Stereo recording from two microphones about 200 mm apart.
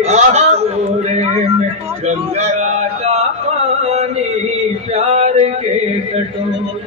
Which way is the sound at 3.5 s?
35° right (ahead or behind).